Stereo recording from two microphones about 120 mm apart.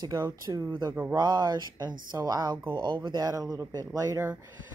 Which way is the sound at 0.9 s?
15° right (ahead or behind).